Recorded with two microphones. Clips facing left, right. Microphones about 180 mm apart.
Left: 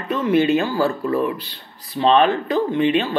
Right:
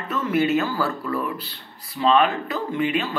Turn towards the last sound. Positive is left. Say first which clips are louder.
# left 6 dB
turn(degrees=25)  # may be behind; listen again after turning